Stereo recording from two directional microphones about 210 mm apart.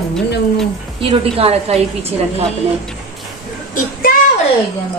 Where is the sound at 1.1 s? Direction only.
30° right (ahead or behind).